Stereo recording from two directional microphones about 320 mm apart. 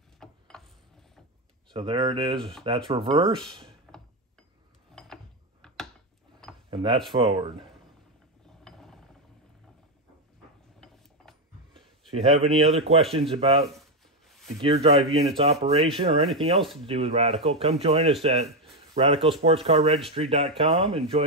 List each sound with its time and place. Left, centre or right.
0.2 s a sound: centre
1.7 s a man's voice: centre
3.9 s mechanisms: centre
6.7 s a sound: centre
7.1 s a man's voice: centre
8.6 s mechanisms: centre
12.1 s a man's voice: centre
13.7 s a sound: centre
14.6 s a man's voice: centre